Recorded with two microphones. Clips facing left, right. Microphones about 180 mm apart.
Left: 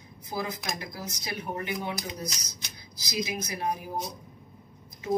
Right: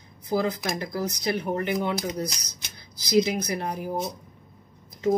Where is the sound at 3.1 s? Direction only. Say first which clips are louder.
Right 10 dB; 60° right (ahead or behind).